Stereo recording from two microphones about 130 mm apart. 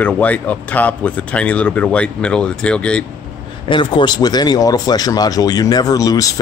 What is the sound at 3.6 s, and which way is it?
Speech, 40° left (ahead or behind).